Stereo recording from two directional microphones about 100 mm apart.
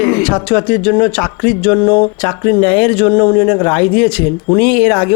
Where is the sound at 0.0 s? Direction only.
15° left (ahead or behind).